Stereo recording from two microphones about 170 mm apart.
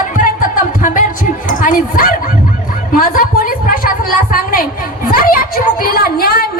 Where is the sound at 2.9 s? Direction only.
55° left (ahead or behind).